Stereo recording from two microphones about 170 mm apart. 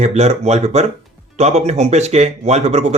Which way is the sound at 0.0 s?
40° right (ahead or behind).